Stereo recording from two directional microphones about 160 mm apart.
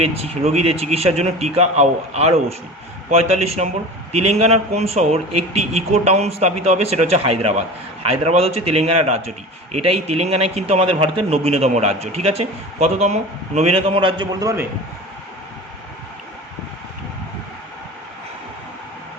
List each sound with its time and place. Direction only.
0.0 s a man's voice: 40° right (ahead or behind); by 14.7 s 20° right (ahead or behind)